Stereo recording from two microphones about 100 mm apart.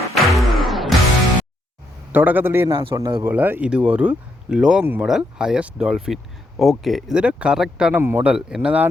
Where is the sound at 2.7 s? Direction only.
50° right (ahead or behind).